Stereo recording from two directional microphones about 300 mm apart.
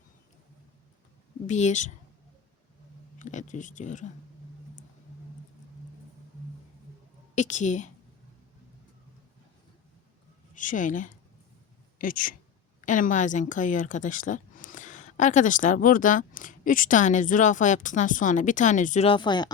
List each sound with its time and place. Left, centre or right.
1.5 s a woman's voice: left
3.2 s speech: left
7.3 s a woman's voice: left
10.5 s a woman's voice: left